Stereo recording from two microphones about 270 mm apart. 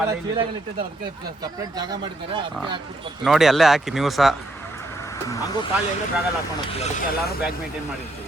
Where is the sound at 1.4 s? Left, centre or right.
Centre.